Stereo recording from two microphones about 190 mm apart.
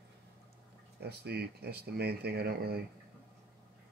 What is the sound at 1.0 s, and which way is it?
Speech, 60° right (ahead or behind).